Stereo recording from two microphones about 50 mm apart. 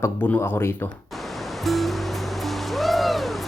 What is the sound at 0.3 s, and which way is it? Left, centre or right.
Speech, left.